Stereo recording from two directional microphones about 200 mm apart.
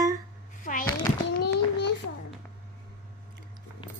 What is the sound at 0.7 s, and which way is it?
Speech, 40° left (ahead or behind).